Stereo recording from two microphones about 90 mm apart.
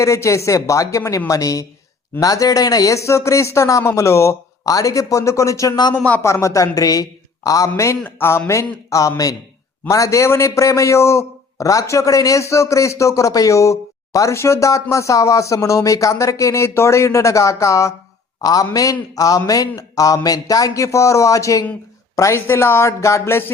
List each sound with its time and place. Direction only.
0.0 s a man's voice: 35° left (ahead or behind)
5.9 s speech: 15° left (ahead or behind)
6.2 s a man's voice: 35° left (ahead or behind)
8.0 s a man's voice: 25° left (ahead or behind)